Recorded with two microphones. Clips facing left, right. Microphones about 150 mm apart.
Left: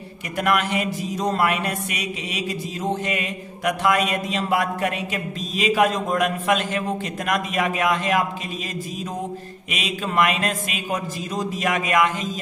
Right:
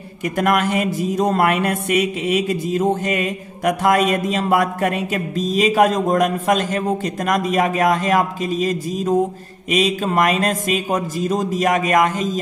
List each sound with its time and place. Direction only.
0.4 s mantra: 45° right (ahead or behind)
7.2 s speech: 40° right (ahead or behind)